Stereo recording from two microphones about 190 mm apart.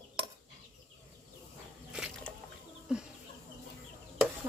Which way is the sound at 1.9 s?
5° right (ahead or behind).